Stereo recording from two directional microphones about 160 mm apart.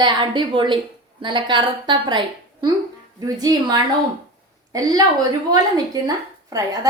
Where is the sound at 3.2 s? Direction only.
25° right (ahead or behind).